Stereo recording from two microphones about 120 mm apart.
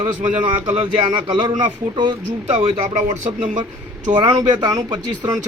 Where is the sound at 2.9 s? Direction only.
90° right.